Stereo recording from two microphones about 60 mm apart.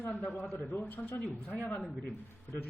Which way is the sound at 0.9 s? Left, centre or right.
Left.